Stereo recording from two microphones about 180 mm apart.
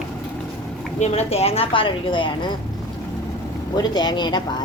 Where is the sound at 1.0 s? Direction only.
35° left (ahead or behind).